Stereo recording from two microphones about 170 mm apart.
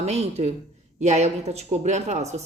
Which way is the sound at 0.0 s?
40° right (ahead or behind).